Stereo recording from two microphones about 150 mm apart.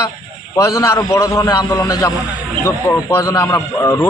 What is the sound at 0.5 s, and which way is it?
A man's voice, 20° left (ahead or behind).